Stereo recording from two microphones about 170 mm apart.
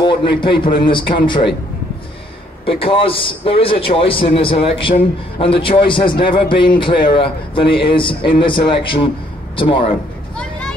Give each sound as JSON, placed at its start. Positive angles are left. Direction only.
{"t": 0.0, "sound": "a man's voice", "side_deg": 30}
{"t": 2.6, "sound": "a man's voice", "side_deg": 30}